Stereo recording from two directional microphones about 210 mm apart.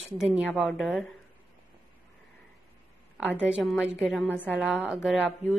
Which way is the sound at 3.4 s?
Centre (ahead or behind).